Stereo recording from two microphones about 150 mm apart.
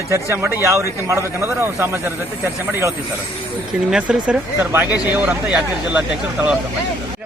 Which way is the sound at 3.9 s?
5° right (ahead or behind).